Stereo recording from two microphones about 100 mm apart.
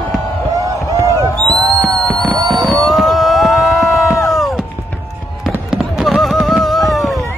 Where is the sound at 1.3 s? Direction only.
10° left (ahead or behind).